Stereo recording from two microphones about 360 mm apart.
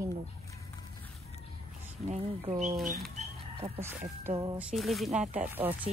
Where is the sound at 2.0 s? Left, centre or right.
Centre.